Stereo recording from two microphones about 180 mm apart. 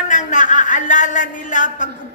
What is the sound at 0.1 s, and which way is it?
Speech, 45° left (ahead or behind).